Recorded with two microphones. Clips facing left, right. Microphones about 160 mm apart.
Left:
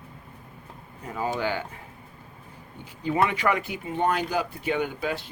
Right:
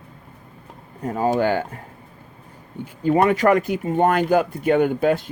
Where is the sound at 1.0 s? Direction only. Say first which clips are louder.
Right 9 dB; 40° right (ahead or behind).